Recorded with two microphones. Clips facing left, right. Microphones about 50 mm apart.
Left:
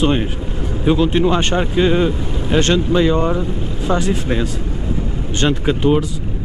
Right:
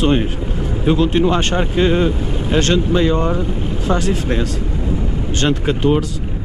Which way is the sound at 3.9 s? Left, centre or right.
Centre.